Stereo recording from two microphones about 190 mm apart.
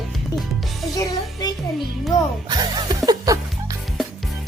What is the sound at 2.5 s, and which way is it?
Music, 20° right (ahead or behind).